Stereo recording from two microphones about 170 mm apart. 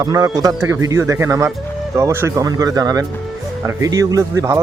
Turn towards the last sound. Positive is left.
turn(degrees=-20)  # may be behind; listen again after turning